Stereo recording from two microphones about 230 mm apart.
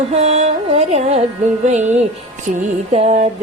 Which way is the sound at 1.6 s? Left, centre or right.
Right.